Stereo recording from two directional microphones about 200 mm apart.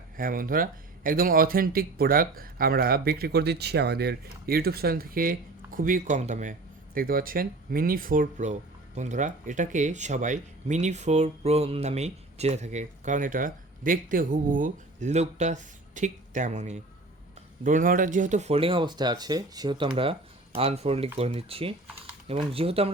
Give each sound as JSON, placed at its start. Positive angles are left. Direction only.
{"t": 0.2, "sound": "speech", "side_deg": -45}